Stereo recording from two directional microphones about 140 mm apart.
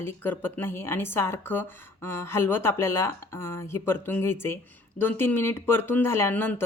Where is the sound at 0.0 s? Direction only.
15° left (ahead or behind).